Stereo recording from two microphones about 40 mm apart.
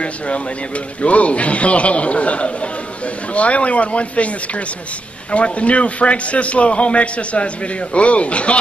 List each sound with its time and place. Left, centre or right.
1.0 s a man's voice: left
5.3 s a man's voice: left